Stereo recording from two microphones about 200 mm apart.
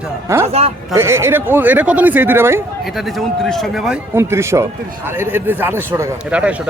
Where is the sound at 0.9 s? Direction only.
15° right (ahead or behind).